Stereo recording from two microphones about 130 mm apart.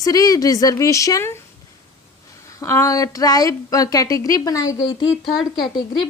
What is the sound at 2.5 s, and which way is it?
Speech, 20° left (ahead or behind).